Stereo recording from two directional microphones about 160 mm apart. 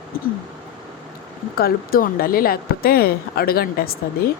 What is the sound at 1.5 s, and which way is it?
Speech, 70° left (ahead or behind).